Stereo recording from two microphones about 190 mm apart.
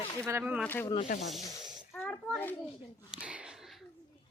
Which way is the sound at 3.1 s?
5° right (ahead or behind).